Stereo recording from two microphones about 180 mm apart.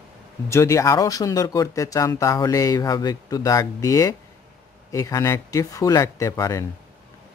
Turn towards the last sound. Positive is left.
turn(degrees=15)  # may be behind; listen again after turning